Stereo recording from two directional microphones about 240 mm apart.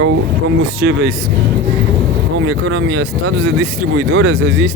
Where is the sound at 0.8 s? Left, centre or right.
Right.